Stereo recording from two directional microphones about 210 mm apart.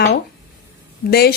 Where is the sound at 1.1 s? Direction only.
50° left (ahead or behind).